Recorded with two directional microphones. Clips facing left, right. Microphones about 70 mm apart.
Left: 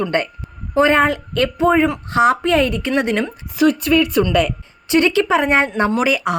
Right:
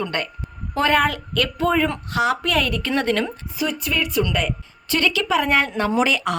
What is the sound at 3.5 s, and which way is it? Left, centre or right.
Speech, left.